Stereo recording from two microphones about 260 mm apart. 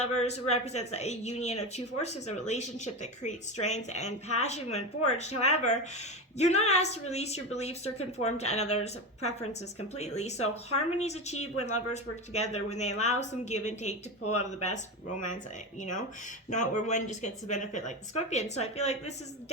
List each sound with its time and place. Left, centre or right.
0.0 s speech: left
15.8 s speech: left